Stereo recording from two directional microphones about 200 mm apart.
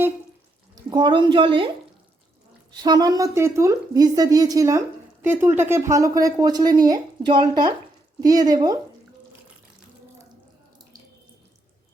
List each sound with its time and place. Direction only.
0.9 s speech: 20° right (ahead or behind)
2.8 s a woman's voice: 20° right (ahead or behind)